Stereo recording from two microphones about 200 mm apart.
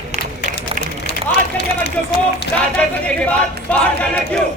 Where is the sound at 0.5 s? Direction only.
55° left (ahead or behind).